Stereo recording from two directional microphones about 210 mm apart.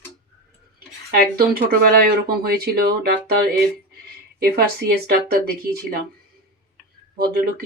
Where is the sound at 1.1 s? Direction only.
45° right (ahead or behind).